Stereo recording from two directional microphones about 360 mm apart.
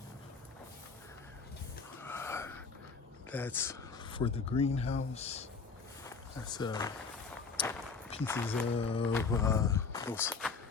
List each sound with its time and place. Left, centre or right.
2.0 s wheeze: centre
3.3 s speech: centre
8.1 s speech: centre